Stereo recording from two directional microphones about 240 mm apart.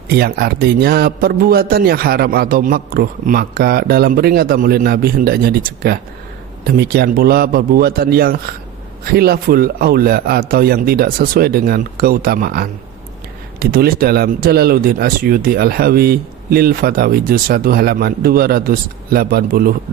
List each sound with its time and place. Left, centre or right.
0.1 s speech: right